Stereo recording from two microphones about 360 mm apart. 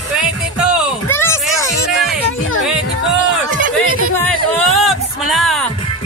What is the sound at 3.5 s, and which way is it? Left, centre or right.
Music, right.